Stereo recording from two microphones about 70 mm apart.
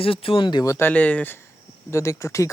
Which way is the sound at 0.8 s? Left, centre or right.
Left.